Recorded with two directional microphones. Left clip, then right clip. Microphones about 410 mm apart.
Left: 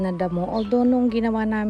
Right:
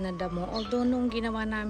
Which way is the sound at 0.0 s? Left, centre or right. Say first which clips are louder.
Left 8 dB; centre.